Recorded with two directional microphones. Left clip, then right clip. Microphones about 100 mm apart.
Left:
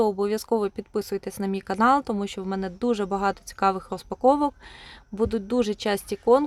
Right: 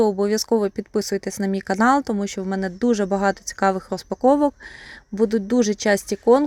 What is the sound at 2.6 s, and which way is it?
Speech, 45° right (ahead or behind).